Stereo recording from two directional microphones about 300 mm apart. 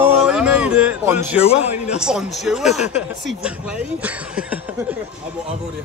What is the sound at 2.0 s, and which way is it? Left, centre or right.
Speech, centre.